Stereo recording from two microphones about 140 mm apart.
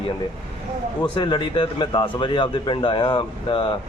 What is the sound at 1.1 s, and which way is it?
A man's voice, 35° left (ahead or behind).